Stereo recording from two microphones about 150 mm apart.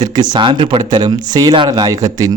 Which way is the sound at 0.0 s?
30° right (ahead or behind).